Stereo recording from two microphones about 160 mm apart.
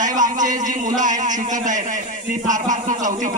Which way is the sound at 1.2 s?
50° right (ahead or behind).